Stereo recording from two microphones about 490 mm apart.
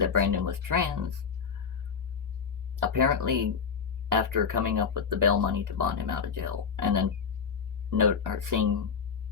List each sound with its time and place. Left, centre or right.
0.0 s speech: right
2.9 s speech: right